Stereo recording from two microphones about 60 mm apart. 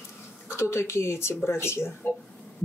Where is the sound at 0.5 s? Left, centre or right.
Left.